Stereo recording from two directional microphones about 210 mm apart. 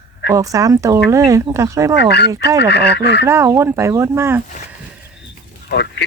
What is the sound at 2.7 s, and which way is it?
Speech, 55° left (ahead or behind).